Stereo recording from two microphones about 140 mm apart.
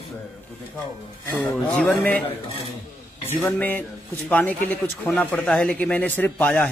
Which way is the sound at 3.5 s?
10° left (ahead or behind).